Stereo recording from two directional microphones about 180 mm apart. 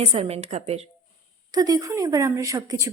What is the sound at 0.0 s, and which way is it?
Speech, 35° right (ahead or behind).